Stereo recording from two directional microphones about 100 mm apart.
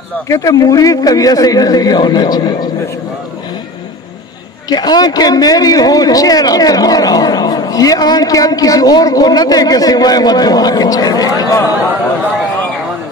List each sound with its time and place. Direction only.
0.3 s a man's voice: 35° left (ahead or behind)
4.6 s a man's voice: 45° left (ahead or behind)